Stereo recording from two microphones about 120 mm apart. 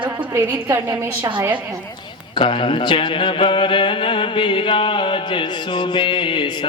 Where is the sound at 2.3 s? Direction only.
45° left (ahead or behind).